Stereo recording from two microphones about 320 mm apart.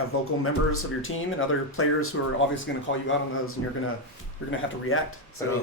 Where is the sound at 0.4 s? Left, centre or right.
Left.